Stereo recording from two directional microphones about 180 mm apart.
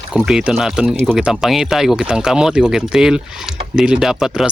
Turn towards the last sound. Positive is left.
turn(degrees=-5)  # may be behind; listen again after turning